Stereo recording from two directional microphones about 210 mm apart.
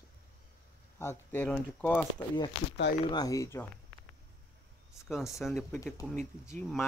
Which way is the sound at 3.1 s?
15° left (ahead or behind).